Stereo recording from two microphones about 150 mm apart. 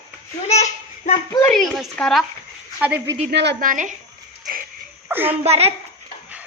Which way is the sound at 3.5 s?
65° right (ahead or behind).